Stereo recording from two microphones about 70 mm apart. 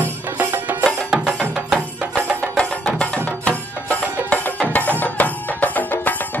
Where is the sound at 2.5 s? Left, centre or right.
Centre.